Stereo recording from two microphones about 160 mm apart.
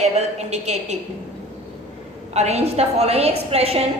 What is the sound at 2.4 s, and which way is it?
A woman's voice, 40° right (ahead or behind).